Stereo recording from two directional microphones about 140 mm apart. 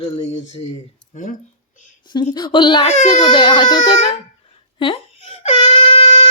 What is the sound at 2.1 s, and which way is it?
Speech, 30° left (ahead or behind).